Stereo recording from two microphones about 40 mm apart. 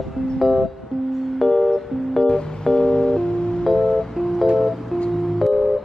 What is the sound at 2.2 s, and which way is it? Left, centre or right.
Music, centre.